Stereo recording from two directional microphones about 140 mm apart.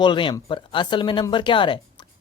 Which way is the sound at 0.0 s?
35° left (ahead or behind).